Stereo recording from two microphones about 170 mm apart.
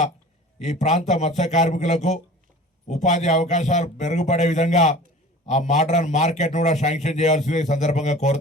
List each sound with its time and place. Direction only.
0.6 s a man's voice: 45° left (ahead or behind)